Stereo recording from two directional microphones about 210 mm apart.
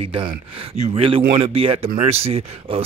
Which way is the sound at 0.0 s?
25° right (ahead or behind).